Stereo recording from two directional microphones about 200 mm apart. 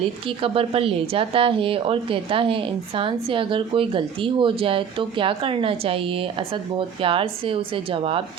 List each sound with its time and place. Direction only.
0.3 s speech: 25° right (ahead or behind)